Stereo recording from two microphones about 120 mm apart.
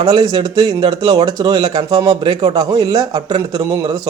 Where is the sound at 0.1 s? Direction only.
35° right (ahead or behind).